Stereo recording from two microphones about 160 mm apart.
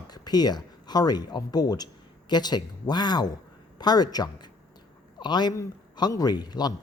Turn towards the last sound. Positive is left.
turn(degrees=25)  # may be behind; listen again after turning